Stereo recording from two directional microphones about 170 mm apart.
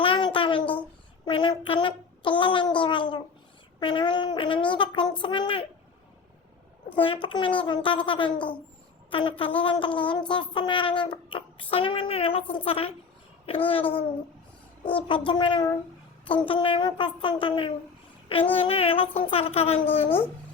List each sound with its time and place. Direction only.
0.0 s a sound: 30° left (ahead or behind)
1.2 s child singing: 30° left (ahead or behind)
3.8 s a sound: 30° left (ahead or behind)
6.9 s a child's voice: 30° left (ahead or behind)
9.0 s a sound: 30° left (ahead or behind)
9.4 s a woman's voice: 30° left (ahead or behind)
10.5 s child singing: 30° left (ahead or behind)
14.8 s a woman's voice: 30° left (ahead or behind)
18.5 s child singing: 35° left (ahead or behind)